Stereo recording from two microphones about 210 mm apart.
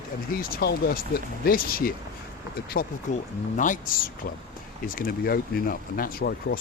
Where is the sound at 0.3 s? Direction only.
45° left (ahead or behind).